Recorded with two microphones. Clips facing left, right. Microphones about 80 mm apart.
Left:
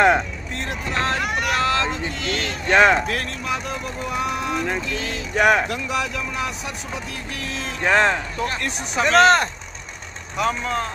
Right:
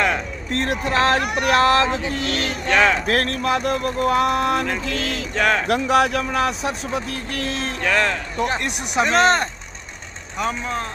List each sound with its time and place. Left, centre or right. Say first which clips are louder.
0.5 s a sound: right 6 dB; right
2.7 s speech: left 2 dB; left
3.1 s speech: right 6 dB; right
4.8 s speech: right 3 dB; right
5.3 s speech: left 3 dB; centre
5.7 s speech: right 8 dB; right
7.3 s music: right 5 dB; right
7.8 s speech: left 3 dB; left
8.4 s speech: right 3 dB; right
10.3 s speech: left 2 dB; centre